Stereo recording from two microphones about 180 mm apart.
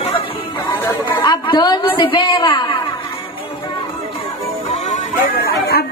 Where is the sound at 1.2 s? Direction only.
25° left (ahead or behind).